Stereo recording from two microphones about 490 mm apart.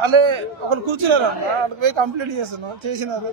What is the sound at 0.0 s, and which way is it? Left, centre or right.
A man's voice, right.